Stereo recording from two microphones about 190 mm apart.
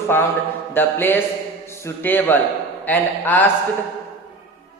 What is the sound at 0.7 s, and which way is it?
A man's voice, 10° left (ahead or behind).